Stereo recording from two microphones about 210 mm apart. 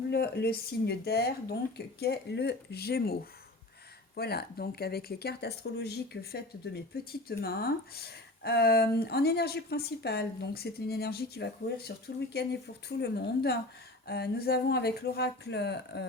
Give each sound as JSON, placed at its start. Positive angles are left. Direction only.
{"t": 0.1, "sound": "speech", "side_deg": 50}